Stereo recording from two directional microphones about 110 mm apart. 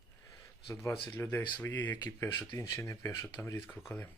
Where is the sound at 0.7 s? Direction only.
25° left (ahead or behind).